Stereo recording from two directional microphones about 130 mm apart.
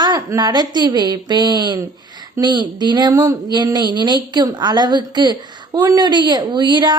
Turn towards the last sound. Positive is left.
turn(degrees=-35)  # may be behind; listen again after turning